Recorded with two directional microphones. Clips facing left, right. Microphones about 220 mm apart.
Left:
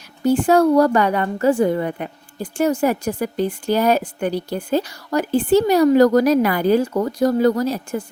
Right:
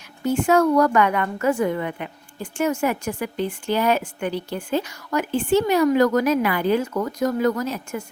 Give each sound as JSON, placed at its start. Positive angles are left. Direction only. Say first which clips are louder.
{"t": 0.2, "sound": "a woman's voice", "louder": "left 4 dB", "side_deg": 35}